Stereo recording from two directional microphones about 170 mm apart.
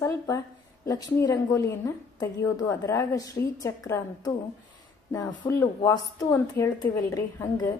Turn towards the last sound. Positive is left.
turn(degrees=20)  # may be behind; listen again after turning